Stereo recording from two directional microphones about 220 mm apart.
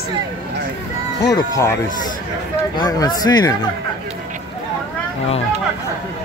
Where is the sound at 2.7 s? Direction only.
20° left (ahead or behind).